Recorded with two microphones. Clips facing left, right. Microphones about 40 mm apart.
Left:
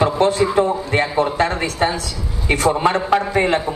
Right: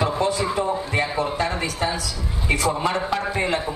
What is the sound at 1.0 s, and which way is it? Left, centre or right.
Speech, left.